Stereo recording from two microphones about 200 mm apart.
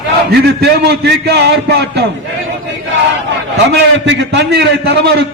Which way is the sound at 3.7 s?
60° right (ahead or behind).